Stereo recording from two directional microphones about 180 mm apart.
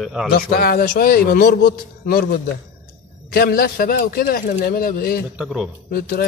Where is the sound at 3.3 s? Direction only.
55° left (ahead or behind).